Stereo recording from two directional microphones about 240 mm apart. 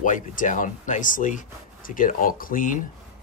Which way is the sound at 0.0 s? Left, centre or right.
Left.